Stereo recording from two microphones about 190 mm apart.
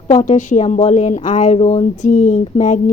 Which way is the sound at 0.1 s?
40° left (ahead or behind).